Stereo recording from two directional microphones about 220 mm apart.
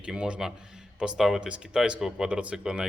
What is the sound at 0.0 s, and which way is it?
Speech, 5° right (ahead or behind).